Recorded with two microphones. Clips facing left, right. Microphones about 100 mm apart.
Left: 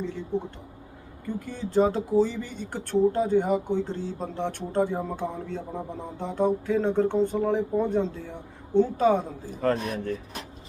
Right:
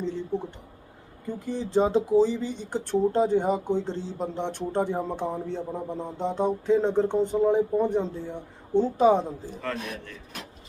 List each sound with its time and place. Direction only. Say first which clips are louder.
1.4 s speech: even; 20° right (ahead or behind)
9.6 s a man's voice: left 10 dB; 40° left (ahead or behind)